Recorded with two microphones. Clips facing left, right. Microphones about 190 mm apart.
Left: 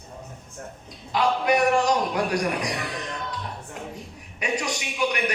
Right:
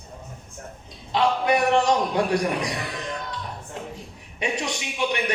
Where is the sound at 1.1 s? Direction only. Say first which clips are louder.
Right 1 dB; 25° right (ahead or behind).